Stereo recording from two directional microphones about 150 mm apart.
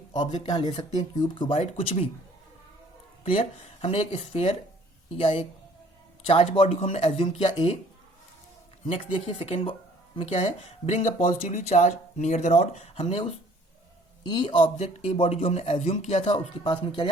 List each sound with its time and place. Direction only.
0.9 s speech: 30° left (ahead or behind)
1.5 s speech: 45° left (ahead or behind)
3.3 s speech: 40° left (ahead or behind)
8.9 s speech: 35° left (ahead or behind)
16.6 s speech: 30° left (ahead or behind)